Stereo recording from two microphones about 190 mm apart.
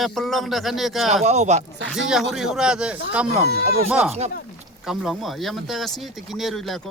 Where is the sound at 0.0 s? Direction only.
Centre (ahead or behind).